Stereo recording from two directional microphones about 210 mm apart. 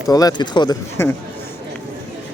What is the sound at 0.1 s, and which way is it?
Speech, 15° left (ahead or behind).